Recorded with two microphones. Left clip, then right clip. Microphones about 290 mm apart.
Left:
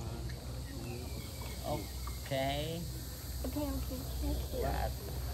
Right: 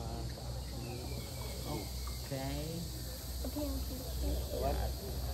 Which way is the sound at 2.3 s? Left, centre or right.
Centre.